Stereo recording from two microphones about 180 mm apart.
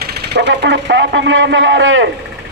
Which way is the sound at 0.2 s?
70° right (ahead or behind).